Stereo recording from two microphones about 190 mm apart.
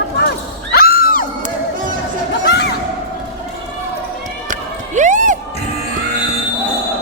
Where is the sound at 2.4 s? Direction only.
60° left (ahead or behind).